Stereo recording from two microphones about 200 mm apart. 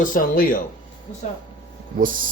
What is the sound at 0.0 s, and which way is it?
Speech, 40° left (ahead or behind).